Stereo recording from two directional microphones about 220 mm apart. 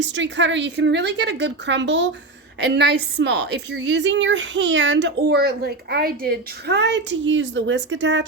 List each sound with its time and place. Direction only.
0.0 s a woman's voice: 55° right (ahead or behind)